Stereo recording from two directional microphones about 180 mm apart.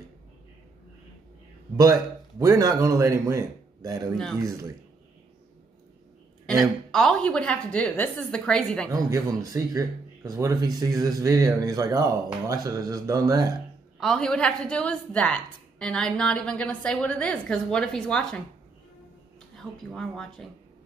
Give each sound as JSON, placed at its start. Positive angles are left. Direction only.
{"t": 1.8, "sound": "a man's voice", "side_deg": -20}
{"t": 6.4, "sound": "a woman's voice", "side_deg": 0}
{"t": 8.9, "sound": "speech", "side_deg": -20}
{"t": 13.9, "sound": "a woman's voice", "side_deg": 0}
{"t": 19.5, "sound": "a woman's voice", "side_deg": 5}